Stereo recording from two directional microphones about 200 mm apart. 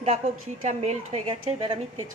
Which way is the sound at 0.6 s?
30° right (ahead or behind).